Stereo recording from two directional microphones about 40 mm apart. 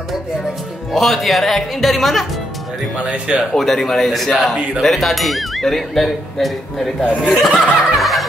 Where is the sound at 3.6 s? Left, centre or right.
Centre.